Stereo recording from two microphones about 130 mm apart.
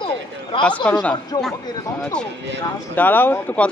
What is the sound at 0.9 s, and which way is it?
Speech, 5° left (ahead or behind).